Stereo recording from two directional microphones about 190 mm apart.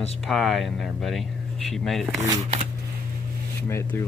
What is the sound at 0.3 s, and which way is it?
Speech, centre (ahead or behind).